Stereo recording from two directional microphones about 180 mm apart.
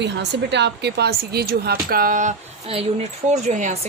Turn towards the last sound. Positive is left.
turn(degrees=-40)  # may be behind; listen again after turning